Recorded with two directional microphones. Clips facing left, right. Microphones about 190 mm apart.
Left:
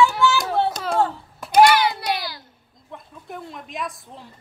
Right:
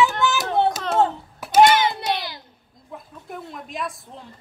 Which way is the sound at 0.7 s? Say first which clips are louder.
Right 2 dB; 5° right (ahead or behind).